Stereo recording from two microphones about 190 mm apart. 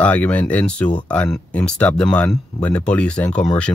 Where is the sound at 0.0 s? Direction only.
5° left (ahead or behind).